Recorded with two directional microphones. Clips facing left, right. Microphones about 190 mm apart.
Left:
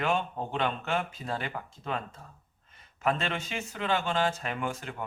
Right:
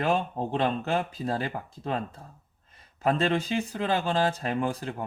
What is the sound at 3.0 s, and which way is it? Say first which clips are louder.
Speech: right 5 dB; 35° right (ahead or behind).